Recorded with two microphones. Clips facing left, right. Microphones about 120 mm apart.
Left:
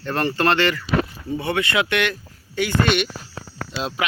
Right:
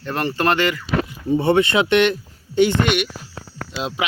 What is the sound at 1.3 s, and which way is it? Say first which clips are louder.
Speech: right 6 dB; 25° right (ahead or behind).